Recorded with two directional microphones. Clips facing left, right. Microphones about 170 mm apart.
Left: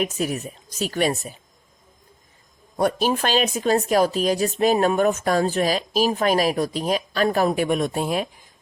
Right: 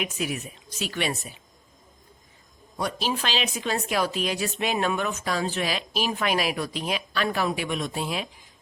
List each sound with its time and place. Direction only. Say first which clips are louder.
0.0 s speech: left 5 dB; 40° left (ahead or behind)
2.7 s speech: left 8 dB; 50° left (ahead or behind)